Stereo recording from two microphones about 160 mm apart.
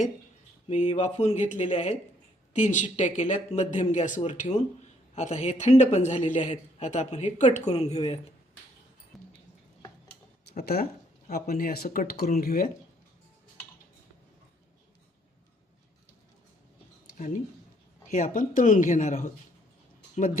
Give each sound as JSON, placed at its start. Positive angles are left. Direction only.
{"t": 0.7, "sound": "a man's voice", "side_deg": 50}
{"t": 1.7, "sound": "speech", "side_deg": 35}
{"t": 2.5, "sound": "a man's voice", "side_deg": 50}
{"t": 9.1, "sound": "mouse", "side_deg": 0}
{"t": 10.6, "sound": "speech", "side_deg": 75}
{"t": 18.1, "sound": "a man's voice", "side_deg": 55}